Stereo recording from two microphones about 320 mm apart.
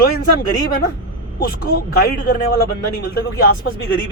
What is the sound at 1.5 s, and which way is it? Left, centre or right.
Speech, left.